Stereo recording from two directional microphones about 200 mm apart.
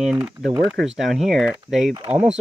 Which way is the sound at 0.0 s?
5° right (ahead or behind).